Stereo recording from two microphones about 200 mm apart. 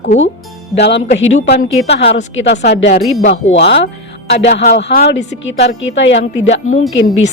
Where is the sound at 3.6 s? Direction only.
55° left (ahead or behind).